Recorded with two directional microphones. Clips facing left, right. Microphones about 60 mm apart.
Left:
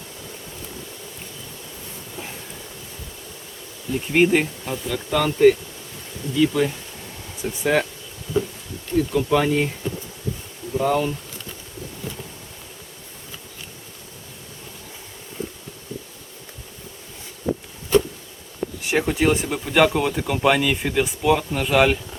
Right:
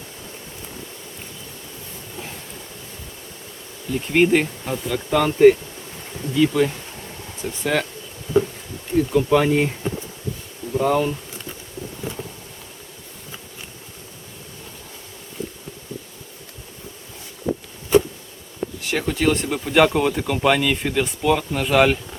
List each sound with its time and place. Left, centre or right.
4.1 s speech: centre
4.6 s insect: centre
6.3 s speech: centre
7.4 s speech: centre
8.3 s a sound: right
9.0 s insect: centre
9.5 s speech: right
10.8 s speech: centre
17.9 s insect: centre
18.9 s speech: centre
19.5 s speech: centre